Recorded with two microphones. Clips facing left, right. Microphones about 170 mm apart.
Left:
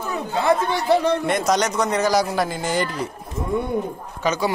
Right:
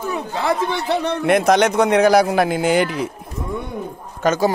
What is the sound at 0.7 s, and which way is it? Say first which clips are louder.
A man's voice: left 2 dB; 65° right (ahead or behind).